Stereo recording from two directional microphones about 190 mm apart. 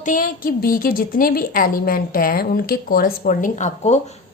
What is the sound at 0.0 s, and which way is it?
A woman's voice, 45° left (ahead or behind).